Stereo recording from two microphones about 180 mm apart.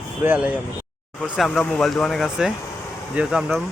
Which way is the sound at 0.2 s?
10° right (ahead or behind).